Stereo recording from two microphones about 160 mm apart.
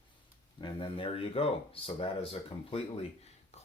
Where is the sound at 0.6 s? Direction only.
30° left (ahead or behind).